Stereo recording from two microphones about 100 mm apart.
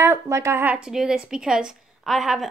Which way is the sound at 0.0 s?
25° right (ahead or behind).